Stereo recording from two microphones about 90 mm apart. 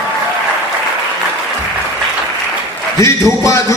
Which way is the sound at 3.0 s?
35° left (ahead or behind).